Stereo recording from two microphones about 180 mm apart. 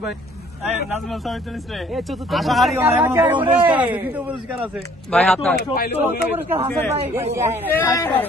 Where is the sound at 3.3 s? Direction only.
25° right (ahead or behind).